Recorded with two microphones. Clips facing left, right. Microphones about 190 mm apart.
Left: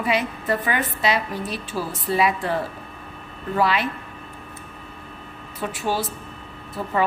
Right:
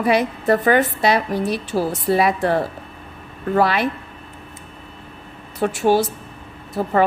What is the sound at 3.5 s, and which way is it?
Speech, 45° right (ahead or behind).